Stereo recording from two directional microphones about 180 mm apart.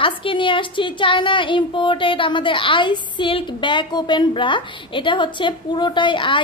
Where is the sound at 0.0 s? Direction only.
30° left (ahead or behind).